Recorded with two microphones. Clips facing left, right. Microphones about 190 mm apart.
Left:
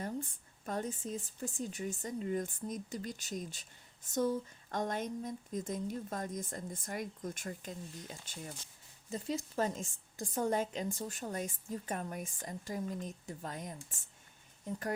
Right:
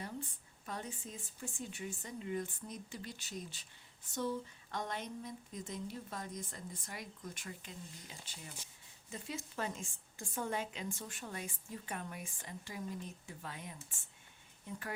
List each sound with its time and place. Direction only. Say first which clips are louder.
0.0 s a woman's voice: left 5 dB; 45° left (ahead or behind)
9.0 s a woman's voice: left 7 dB; 35° left (ahead or behind)